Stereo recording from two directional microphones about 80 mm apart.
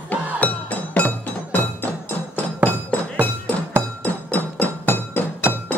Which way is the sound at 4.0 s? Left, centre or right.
Centre.